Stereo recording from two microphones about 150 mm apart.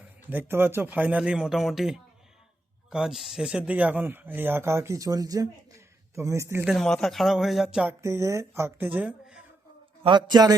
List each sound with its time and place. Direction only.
0.3 s a man's voice: 15° right (ahead or behind)
6.7 s speech: 5° left (ahead or behind)
8.0 s speech: 20° right (ahead or behind)
10.0 s a man's voice: 30° right (ahead or behind)